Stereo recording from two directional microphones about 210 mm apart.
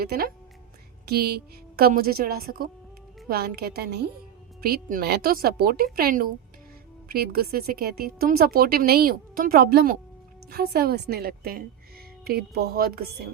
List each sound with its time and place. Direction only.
0.0 s a woman's voice: 45° right (ahead or behind)